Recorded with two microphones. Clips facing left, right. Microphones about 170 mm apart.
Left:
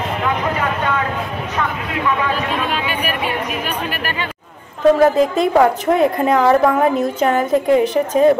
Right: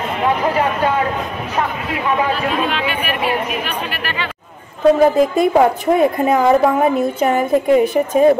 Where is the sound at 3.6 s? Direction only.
45° left (ahead or behind).